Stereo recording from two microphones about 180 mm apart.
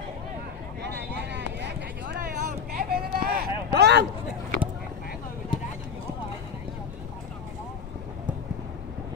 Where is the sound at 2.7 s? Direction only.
60° right (ahead or behind).